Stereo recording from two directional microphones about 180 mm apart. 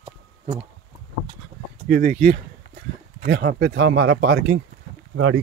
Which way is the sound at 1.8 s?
50° right (ahead or behind).